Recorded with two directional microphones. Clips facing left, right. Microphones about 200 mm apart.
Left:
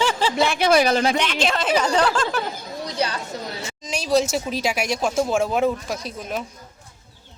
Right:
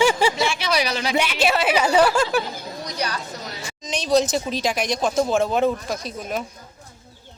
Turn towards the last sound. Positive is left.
turn(degrees=5)  # may be behind; listen again after turning